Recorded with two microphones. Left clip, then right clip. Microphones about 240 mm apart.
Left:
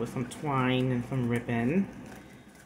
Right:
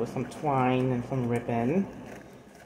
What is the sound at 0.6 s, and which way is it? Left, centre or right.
Speech, left.